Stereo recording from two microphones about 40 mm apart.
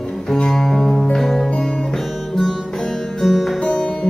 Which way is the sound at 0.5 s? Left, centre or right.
Centre.